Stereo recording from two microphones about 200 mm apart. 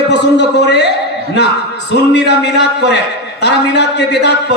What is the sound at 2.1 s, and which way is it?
Speech, 60° left (ahead or behind).